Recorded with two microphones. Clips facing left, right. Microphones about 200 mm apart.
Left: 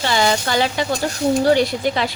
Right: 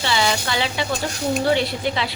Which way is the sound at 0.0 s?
45° left (ahead or behind).